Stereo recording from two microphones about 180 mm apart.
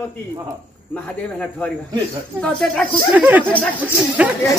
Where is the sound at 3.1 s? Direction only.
10° right (ahead or behind).